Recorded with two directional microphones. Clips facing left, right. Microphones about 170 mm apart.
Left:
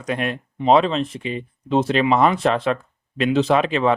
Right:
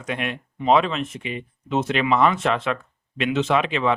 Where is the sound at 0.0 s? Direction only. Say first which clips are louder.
Left 4 dB; 40° left (ahead or behind).